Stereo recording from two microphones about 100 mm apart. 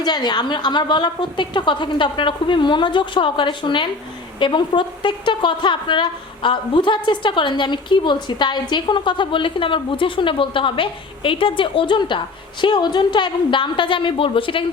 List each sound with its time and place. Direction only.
0.0 s a woman's voice: 45° left (ahead or behind)